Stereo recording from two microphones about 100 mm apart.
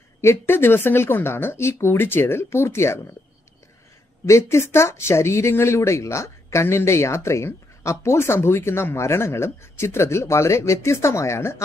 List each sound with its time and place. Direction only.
0.2 s speech: 25° left (ahead or behind)
4.3 s speech: 25° left (ahead or behind)